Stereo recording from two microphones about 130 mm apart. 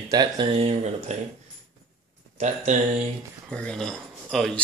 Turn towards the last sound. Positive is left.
turn(degrees=5)  # may be behind; listen again after turning